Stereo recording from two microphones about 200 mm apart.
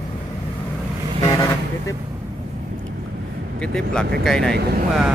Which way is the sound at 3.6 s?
5° left (ahead or behind).